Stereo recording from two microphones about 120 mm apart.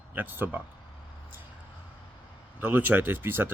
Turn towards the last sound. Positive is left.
turn(degrees=-15)  # may be behind; listen again after turning